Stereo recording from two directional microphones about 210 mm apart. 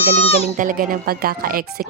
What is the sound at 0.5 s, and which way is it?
Speech, 40° right (ahead or behind).